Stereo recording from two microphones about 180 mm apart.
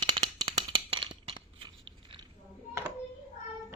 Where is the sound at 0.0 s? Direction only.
25° right (ahead or behind).